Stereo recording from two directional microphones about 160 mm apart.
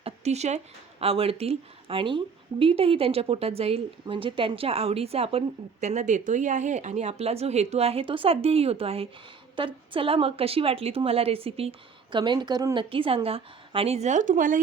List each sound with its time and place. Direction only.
0.0 s speech: 45° right (ahead or behind)